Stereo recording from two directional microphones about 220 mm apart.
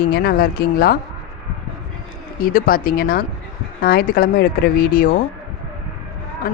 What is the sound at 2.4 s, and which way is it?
Speech, 40° left (ahead or behind).